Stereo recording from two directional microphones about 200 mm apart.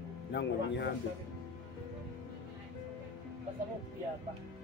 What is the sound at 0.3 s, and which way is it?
Speech, 60° left (ahead or behind).